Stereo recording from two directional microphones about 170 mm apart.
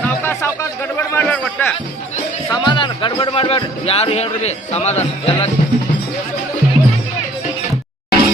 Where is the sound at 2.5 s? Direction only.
25° left (ahead or behind).